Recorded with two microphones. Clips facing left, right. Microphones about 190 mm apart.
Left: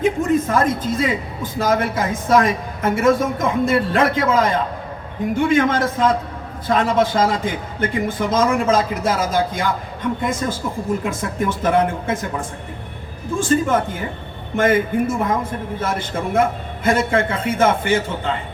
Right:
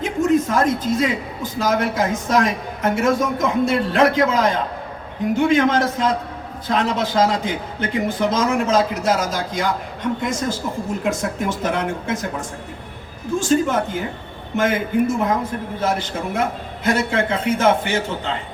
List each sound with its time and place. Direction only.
0.0 s speech: 55° left (ahead or behind)